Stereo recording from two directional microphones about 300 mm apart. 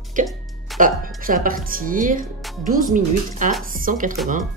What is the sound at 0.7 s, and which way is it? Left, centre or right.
Speech, right.